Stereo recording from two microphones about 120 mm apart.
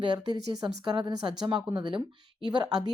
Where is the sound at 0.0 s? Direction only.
40° right (ahead or behind).